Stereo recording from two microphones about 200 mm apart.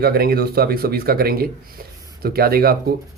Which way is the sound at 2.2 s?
50° right (ahead or behind).